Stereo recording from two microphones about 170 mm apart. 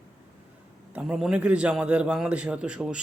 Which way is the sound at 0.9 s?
5° right (ahead or behind).